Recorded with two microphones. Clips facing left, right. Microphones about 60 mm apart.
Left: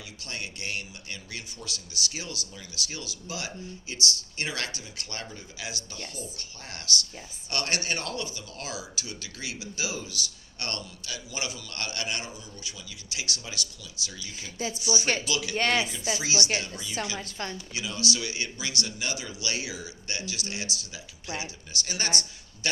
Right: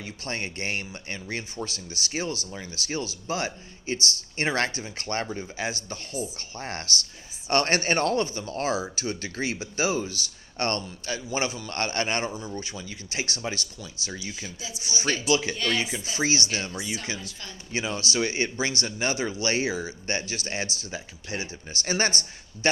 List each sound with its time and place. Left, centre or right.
0.0 s speech: right
15.5 s a woman's voice: left
16.1 s speech: right
17.2 s a woman's voice: left
17.7 s speech: right